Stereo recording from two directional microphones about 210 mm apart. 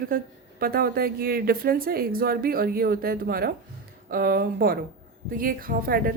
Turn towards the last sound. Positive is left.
turn(degrees=-45)  # may be behind; listen again after turning